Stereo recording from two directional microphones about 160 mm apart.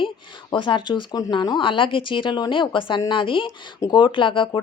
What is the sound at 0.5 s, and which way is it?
Speech, 30° left (ahead or behind).